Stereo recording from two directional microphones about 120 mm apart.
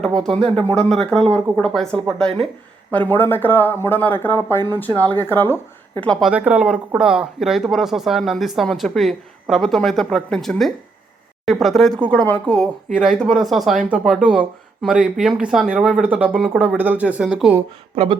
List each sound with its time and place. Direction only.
0.7 s speech: 5° left (ahead or behind)
3.1 s speech: 15° left (ahead or behind)
6.1 s speech: centre (ahead or behind)
6.3 s speech: 10° right (ahead or behind); by 12.6 s 10° left (ahead or behind)
12.9 s speech: 5° right (ahead or behind)
17.9 s speech: 50° right (ahead or behind)